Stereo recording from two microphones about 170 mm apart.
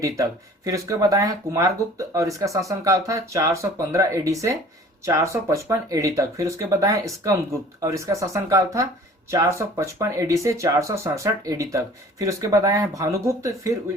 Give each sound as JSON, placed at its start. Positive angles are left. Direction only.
{"t": 0.0, "sound": "speech", "side_deg": -20}